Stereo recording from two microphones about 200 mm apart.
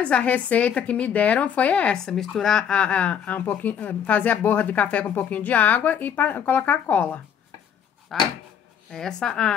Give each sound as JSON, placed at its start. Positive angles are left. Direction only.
{"t": 0.0, "sound": "a woman's voice", "side_deg": 5}